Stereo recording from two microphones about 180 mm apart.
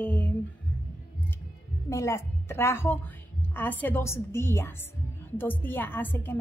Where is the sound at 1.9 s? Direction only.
15° left (ahead or behind).